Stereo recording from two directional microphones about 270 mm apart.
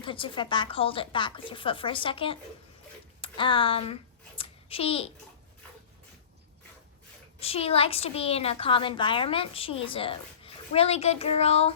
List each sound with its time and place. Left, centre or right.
0.0 s a woman's voice: centre
7.3 s a woman's voice: left